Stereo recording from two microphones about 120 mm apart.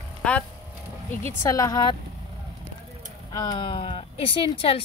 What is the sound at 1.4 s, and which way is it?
Speech, 30° left (ahead or behind).